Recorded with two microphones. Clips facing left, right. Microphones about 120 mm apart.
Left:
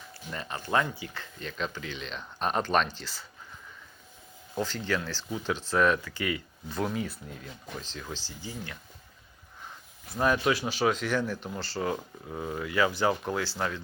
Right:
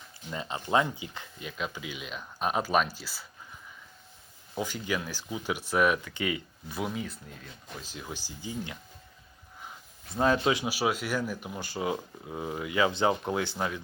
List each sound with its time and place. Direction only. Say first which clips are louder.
0.3 s speech: right 2 dB; 20° right (ahead or behind)
4.5 s speech: left 2 dB; 10° right (ahead or behind)
6.7 s speech: left 3 dB; 5° right (ahead or behind)
7.8 s speech: right 1 dB; 10° right (ahead or behind)
10.2 s speech: right 1 dB; 25° right (ahead or behind)